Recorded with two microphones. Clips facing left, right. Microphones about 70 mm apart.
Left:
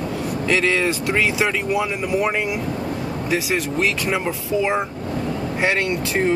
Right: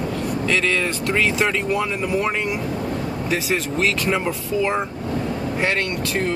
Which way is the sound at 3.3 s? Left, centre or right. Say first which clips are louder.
Left 1 dB; centre.